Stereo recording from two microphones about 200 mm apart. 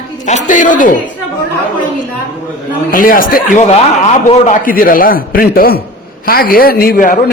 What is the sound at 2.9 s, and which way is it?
A man's voice, 45° left (ahead or behind).